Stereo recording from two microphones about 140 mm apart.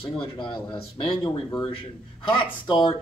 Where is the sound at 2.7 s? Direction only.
35° left (ahead or behind).